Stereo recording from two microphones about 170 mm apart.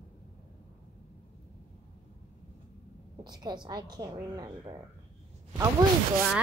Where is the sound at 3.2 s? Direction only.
25° right (ahead or behind).